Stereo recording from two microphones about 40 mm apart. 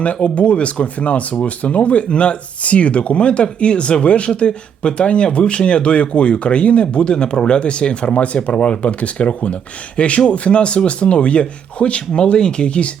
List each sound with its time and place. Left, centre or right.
0.0 s speech: left